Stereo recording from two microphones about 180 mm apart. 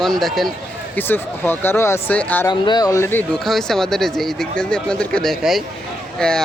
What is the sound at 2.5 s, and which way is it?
Speech, 25° left (ahead or behind).